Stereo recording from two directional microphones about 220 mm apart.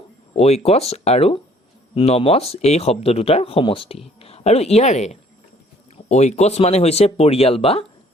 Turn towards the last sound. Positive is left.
turn(degrees=25)  # may be behind; listen again after turning